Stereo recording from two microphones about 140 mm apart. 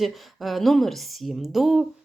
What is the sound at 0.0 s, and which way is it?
Speech, centre (ahead or behind).